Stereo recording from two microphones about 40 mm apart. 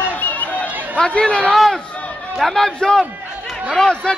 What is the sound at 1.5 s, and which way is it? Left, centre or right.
A man's voice, centre.